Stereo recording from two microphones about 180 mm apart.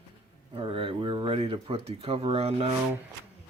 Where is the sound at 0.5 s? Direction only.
30° right (ahead or behind).